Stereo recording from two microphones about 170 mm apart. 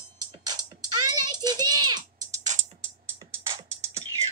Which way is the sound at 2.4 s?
45° right (ahead or behind).